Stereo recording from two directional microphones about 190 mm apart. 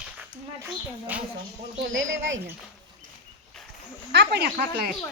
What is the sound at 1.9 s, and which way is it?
Speech, 85° right.